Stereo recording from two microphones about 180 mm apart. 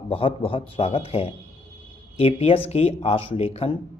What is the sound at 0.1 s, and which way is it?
Speech, 30° left (ahead or behind).